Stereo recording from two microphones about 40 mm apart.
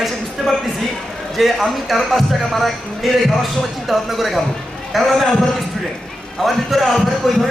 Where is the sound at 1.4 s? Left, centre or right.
Centre.